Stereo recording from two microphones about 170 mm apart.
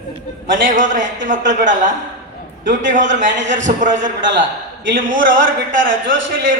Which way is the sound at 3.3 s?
90° right.